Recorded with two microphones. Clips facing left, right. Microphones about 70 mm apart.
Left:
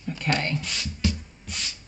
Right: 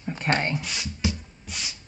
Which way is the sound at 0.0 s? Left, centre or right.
Right.